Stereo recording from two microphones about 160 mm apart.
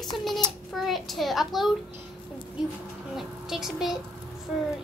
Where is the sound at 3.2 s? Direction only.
Centre (ahead or behind).